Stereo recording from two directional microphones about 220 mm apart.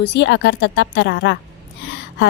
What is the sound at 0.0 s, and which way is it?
A woman's voice, 55° left (ahead or behind).